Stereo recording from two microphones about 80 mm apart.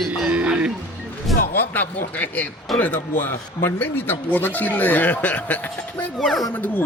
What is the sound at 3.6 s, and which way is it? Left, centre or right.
Speech, left.